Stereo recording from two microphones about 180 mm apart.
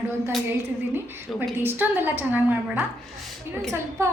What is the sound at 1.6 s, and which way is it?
A woman's voice, 10° right (ahead or behind).